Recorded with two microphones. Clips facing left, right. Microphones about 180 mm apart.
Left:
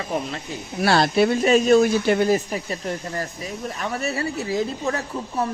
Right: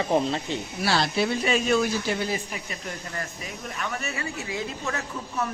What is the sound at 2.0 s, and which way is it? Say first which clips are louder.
Speech: left 9 dB; 55° left (ahead or behind).